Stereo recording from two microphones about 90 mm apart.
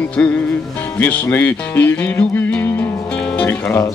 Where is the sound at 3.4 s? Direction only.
25° left (ahead or behind).